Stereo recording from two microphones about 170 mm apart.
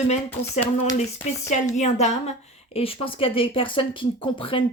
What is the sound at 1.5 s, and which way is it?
A woman's voice, 45° left (ahead or behind).